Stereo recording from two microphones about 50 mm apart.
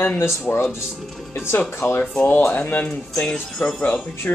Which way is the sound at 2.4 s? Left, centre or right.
Left.